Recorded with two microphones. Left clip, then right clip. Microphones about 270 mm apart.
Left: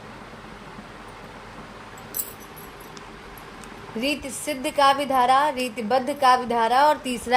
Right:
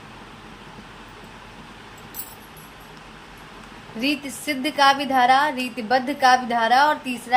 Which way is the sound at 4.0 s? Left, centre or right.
Left.